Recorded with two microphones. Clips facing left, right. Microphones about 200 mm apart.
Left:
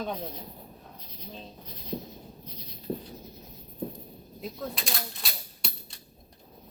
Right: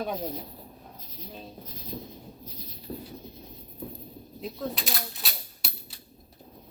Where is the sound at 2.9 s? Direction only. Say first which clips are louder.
Left 4 dB; 30° left (ahead or behind).